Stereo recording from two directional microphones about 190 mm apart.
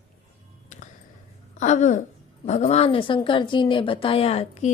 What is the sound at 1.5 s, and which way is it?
A woman's voice, 40° left (ahead or behind).